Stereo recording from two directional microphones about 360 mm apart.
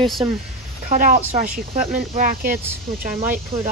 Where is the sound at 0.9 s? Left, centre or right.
Right.